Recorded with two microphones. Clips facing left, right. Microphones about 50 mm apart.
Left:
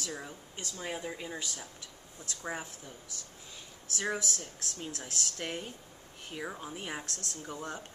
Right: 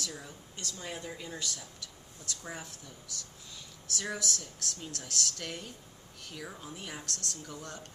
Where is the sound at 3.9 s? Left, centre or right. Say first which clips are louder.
Left 2 dB; left.